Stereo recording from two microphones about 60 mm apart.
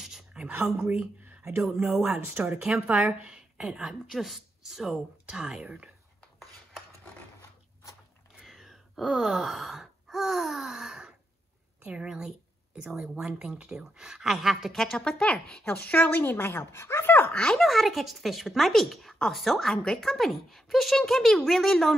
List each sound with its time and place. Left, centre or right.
0.0 s a sound: centre
1.8 s speech: centre
2.1 s speech: right
2.6 s a woman's voice: centre
3.8 s a woman's voice: centre
8.4 s gasp: centre
11.8 s a woman's voice: centre
15.6 s speech: left
17.3 s speech: centre
17.6 s speech: centre